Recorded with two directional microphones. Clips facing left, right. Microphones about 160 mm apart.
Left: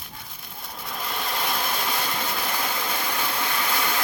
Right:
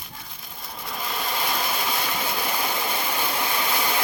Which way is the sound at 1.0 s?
Centre (ahead or behind).